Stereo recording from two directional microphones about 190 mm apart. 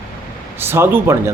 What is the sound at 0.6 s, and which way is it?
Speech, 10° right (ahead or behind).